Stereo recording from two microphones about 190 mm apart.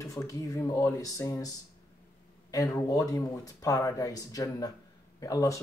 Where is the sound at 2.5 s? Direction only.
20° left (ahead or behind).